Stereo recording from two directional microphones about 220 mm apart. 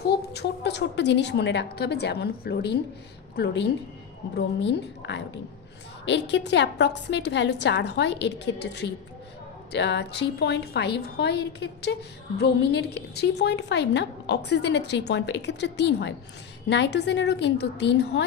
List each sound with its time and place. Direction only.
0.0 s a woman's voice: 50° left (ahead or behind)